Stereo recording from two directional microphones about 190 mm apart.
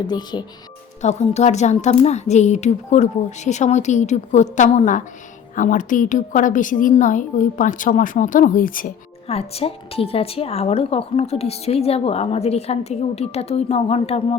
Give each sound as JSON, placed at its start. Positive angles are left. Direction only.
{"t": 0.1, "sound": "speech", "side_deg": 20}
{"t": 1.0, "sound": "a woman's voice", "side_deg": 35}
{"t": 9.2, "sound": "a woman's voice", "side_deg": 30}